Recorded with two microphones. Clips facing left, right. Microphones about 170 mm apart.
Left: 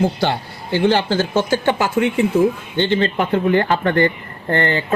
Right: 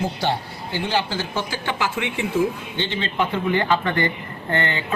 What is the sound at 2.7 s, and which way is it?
A man's voice, 55° left (ahead or behind).